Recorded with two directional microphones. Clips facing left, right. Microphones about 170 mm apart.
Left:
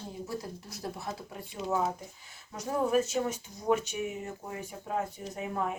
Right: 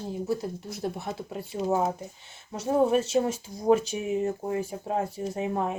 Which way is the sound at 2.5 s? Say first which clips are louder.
Right 5 dB; 25° right (ahead or behind).